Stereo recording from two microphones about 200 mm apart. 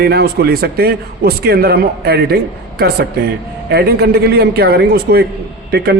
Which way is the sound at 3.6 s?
55° right (ahead or behind).